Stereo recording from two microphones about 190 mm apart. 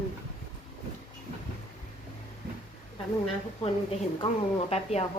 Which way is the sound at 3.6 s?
30° left (ahead or behind).